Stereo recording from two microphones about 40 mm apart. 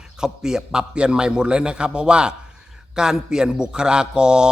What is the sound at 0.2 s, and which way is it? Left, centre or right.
A man's voice, centre.